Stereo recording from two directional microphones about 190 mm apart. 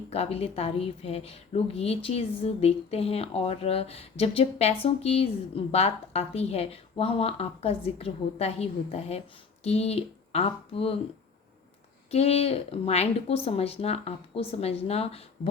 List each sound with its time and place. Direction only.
0.1 s a woman's voice: 30° left (ahead or behind)
12.1 s a woman's voice: 30° left (ahead or behind)